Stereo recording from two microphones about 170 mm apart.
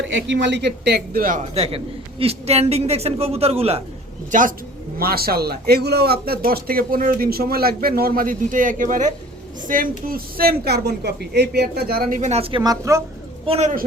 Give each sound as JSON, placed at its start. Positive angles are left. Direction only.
{"t": 0.0, "sound": "a man's voice", "side_deg": -90}
{"t": 4.3, "sound": "speech", "side_deg": -50}
{"t": 4.9, "sound": "speech", "side_deg": -65}
{"t": 12.2, "sound": "speech", "side_deg": -35}
{"t": 13.5, "sound": "a man's voice", "side_deg": -40}